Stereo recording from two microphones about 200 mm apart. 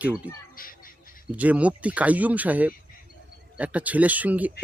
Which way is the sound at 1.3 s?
5° right (ahead or behind).